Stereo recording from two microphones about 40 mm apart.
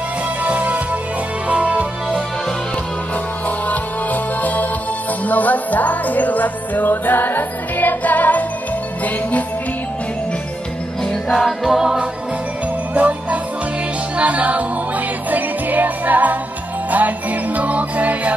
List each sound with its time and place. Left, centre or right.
0.4 s music: right
3.4 s music: left
11.3 s music: centre
12.9 s music: right